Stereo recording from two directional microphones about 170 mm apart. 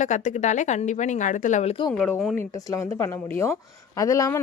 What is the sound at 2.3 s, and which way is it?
A woman's voice, 15° left (ahead or behind).